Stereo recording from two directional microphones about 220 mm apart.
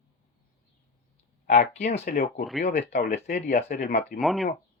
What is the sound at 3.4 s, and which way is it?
Speech, 30° left (ahead or behind).